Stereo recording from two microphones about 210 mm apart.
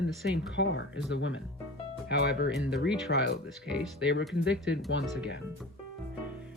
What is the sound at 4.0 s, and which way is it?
Speech, 60° left (ahead or behind).